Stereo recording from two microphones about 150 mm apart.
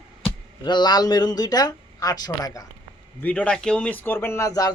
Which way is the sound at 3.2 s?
10° left (ahead or behind).